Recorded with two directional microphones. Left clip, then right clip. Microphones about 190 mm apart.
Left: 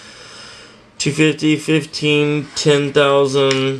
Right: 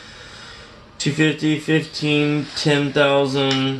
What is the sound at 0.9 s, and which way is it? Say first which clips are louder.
Speech: left 4 dB; 5° left (ahead or behind).